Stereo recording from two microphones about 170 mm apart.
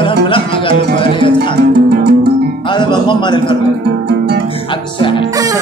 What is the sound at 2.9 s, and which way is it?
Speech, 25° left (ahead or behind).